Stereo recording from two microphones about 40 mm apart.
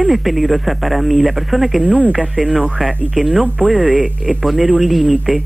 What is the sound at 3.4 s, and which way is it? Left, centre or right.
Speech, right.